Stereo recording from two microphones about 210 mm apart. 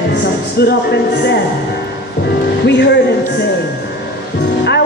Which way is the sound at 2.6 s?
55° left (ahead or behind).